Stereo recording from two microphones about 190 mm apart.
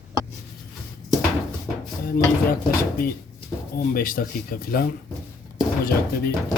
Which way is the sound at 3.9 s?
50° left (ahead or behind).